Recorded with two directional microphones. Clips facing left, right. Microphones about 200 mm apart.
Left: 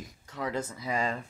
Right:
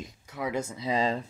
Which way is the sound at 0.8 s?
25° right (ahead or behind).